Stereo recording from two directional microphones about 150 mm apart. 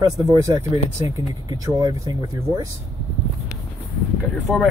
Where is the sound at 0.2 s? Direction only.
25° right (ahead or behind).